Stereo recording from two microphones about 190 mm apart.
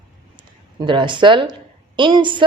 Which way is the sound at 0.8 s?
25° right (ahead or behind).